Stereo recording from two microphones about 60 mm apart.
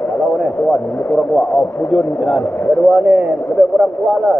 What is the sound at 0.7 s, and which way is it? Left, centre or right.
A man's voice, centre.